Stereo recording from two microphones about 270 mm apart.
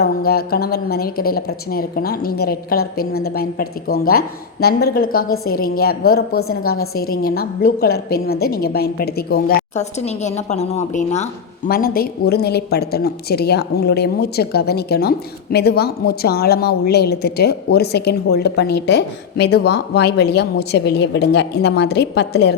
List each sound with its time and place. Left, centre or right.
0.0 s a woman's voice: left